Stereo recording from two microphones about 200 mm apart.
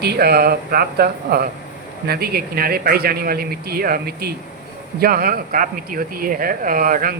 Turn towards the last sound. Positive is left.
turn(degrees=-45)  # may be behind; listen again after turning